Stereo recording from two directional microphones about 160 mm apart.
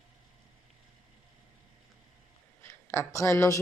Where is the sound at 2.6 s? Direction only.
15° left (ahead or behind).